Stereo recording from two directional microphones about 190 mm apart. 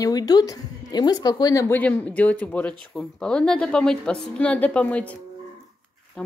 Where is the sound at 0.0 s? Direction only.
20° left (ahead or behind).